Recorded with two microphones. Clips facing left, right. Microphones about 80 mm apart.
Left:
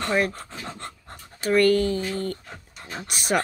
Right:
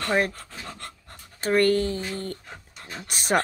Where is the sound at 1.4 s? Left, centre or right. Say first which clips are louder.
Left 2 dB; right.